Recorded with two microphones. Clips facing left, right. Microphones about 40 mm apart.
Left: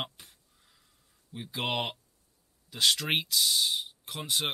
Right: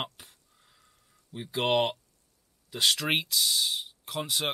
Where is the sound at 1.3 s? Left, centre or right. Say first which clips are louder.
Right 6 dB; centre.